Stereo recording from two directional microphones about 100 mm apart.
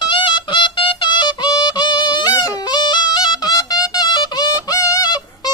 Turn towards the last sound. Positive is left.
turn(degrees=45)  # may be behind; listen again after turning